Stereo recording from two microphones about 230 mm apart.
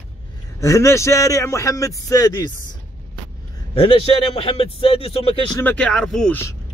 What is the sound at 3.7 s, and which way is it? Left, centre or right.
A man's voice, left.